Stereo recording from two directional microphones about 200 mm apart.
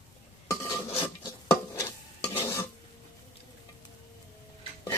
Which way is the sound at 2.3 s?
15° left (ahead or behind).